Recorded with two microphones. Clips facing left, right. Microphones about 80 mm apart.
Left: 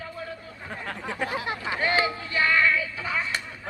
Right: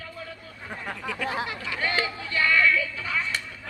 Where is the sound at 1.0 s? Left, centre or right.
Left.